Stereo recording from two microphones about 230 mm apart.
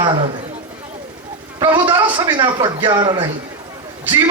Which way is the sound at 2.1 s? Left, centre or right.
Centre.